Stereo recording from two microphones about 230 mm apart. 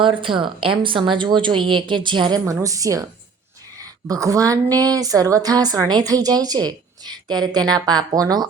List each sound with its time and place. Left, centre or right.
0.2 s a woman's voice: right
4.1 s a woman's voice: centre